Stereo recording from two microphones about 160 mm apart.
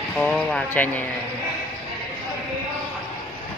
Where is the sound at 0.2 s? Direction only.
5° left (ahead or behind).